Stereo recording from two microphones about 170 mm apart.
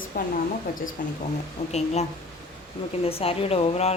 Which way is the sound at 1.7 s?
40° left (ahead or behind).